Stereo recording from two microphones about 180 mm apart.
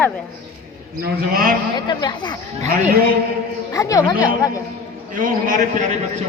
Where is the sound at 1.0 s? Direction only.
55° right (ahead or behind).